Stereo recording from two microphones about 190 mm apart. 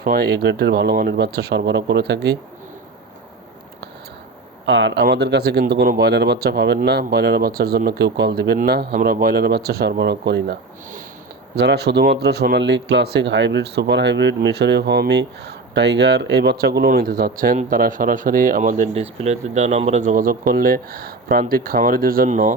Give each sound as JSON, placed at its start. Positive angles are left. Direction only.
{"t": 0.0, "sound": "speech", "side_deg": -55}
{"t": 4.6, "sound": "speech", "side_deg": -70}